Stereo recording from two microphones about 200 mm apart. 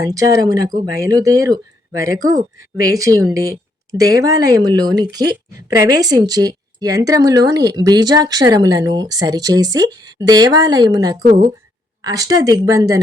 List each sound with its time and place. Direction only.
0.0 s speech: 15° right (ahead or behind)